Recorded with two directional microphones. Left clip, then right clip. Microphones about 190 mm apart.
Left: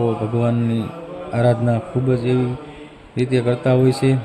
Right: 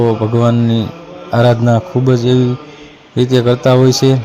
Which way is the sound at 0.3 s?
15° right (ahead or behind).